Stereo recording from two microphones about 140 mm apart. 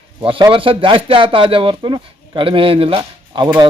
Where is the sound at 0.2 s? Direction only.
35° right (ahead or behind).